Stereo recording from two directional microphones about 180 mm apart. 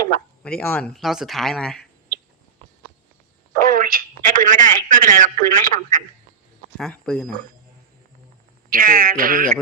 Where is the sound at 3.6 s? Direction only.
50° right (ahead or behind).